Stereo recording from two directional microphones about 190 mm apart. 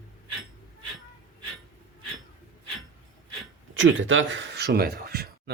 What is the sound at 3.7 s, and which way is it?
Speech, 90° right.